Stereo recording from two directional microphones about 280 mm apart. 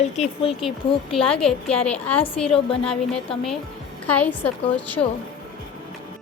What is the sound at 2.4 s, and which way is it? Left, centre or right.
Speech, centre.